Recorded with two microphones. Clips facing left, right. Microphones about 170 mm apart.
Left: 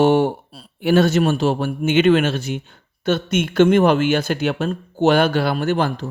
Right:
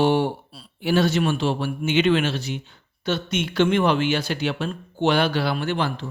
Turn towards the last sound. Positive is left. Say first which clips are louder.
# left 5 dB
turn(degrees=45)  # may be behind; listen again after turning